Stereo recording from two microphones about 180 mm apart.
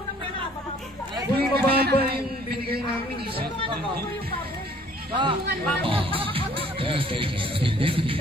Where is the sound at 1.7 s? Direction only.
60° right (ahead or behind).